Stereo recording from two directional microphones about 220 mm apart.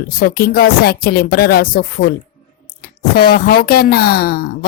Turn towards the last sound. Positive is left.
turn(degrees=45)  # may be behind; listen again after turning